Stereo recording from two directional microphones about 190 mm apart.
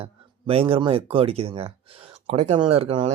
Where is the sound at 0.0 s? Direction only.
30° right (ahead or behind).